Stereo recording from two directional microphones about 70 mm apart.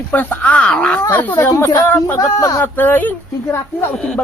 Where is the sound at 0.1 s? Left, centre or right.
Left.